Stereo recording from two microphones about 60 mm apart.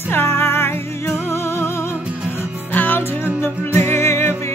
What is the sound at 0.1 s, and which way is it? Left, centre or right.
Music, left.